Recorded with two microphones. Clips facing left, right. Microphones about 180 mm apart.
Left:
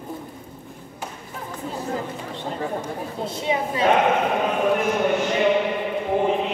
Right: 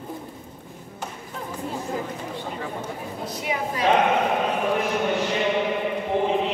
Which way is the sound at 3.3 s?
25° left (ahead or behind).